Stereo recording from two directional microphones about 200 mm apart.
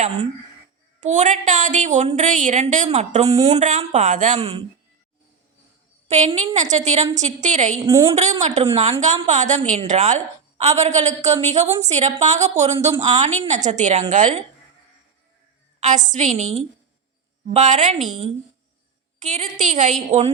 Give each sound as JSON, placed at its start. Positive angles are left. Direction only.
{"t": 1.0, "sound": "a woman's voice", "side_deg": -35}
{"t": 6.1, "sound": "a woman's voice", "side_deg": -35}
{"t": 15.8, "sound": "a woman's voice", "side_deg": -40}
{"t": 19.2, "sound": "a woman's voice", "side_deg": -35}